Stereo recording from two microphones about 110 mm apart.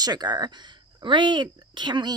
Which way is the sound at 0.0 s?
40° right (ahead or behind).